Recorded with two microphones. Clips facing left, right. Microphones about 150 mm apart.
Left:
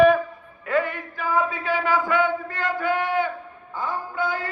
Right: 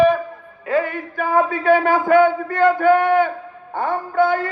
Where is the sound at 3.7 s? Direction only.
60° right (ahead or behind).